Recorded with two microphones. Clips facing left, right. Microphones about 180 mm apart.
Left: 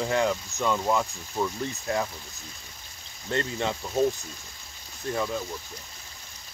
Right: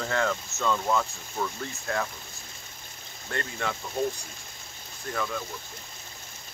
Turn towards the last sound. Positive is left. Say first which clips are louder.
# left 3 dB
turn(degrees=25)  # may be behind; listen again after turning